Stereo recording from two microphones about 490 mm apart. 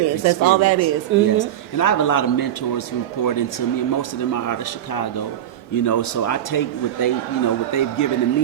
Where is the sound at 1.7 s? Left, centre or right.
Left.